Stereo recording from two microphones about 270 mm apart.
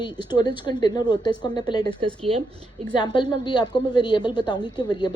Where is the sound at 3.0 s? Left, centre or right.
Centre.